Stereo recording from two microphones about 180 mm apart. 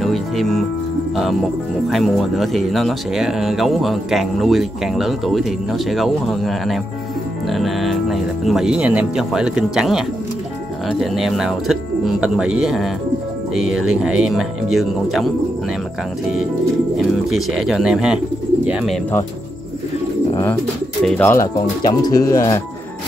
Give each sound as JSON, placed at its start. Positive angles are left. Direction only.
{"t": 0.0, "sound": "music", "side_deg": 0}
{"t": 1.9, "sound": "speech", "side_deg": 0}
{"t": 17.3, "sound": "speech", "side_deg": 0}
{"t": 21.0, "sound": "speech", "side_deg": 5}
{"t": 21.3, "sound": "speech", "side_deg": 20}